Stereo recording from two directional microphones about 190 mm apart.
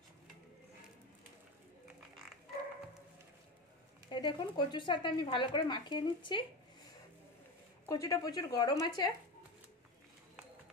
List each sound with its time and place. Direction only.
4.1 s speech: 25° left (ahead or behind)
7.9 s speech: 15° left (ahead or behind)